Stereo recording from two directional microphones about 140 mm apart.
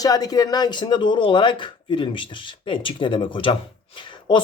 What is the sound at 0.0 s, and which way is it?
A man's voice, 25° left (ahead or behind).